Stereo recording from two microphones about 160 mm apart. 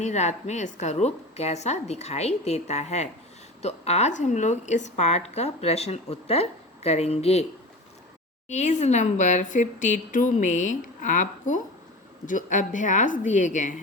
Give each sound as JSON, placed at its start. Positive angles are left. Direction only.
{"t": 0.0, "sound": "a woman's voice", "side_deg": 45}
{"t": 8.4, "sound": "speech", "side_deg": 50}